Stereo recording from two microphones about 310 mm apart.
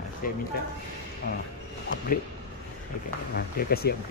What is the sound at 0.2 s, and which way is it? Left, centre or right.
Speech, left.